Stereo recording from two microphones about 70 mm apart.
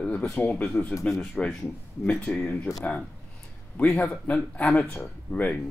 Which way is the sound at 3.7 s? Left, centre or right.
Centre.